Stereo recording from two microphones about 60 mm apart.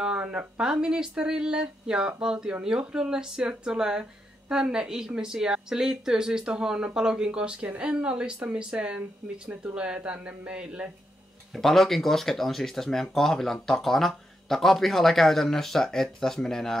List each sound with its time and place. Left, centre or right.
0.0 s speech: centre
11.5 s speech: centre